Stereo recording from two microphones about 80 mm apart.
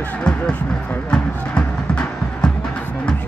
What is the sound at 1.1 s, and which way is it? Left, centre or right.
Music, centre.